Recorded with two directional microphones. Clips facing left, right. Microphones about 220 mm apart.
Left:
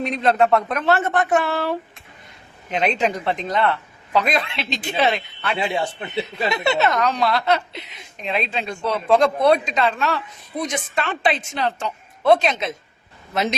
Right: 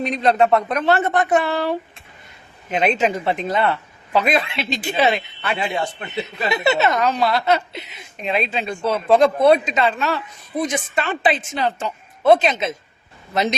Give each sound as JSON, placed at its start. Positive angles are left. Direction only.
{"t": 0.0, "sound": "a woman's voice", "side_deg": 0}
{"t": 5.5, "sound": "a man's voice", "side_deg": 20}
{"t": 6.7, "sound": "a woman's voice", "side_deg": 0}